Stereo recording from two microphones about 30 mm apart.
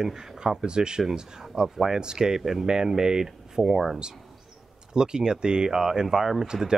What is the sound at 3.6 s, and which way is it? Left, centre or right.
Speech, centre.